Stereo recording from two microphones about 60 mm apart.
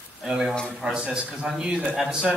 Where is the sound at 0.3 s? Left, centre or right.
Centre.